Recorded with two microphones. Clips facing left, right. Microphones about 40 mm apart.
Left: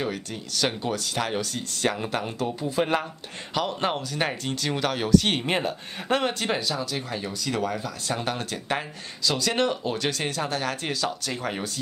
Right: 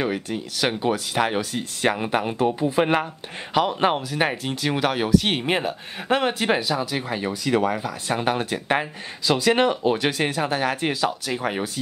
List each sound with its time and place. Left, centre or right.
0.0 s speech: centre